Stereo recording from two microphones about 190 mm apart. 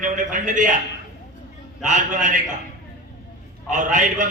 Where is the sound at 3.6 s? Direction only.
40° right (ahead or behind).